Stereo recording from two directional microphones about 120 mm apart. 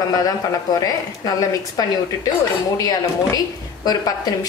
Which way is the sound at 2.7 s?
30° left (ahead or behind).